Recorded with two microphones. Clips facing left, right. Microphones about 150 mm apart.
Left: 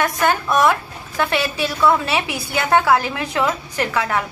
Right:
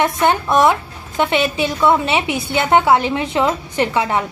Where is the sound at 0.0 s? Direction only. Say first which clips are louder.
Right 3 dB; 25° right (ahead or behind).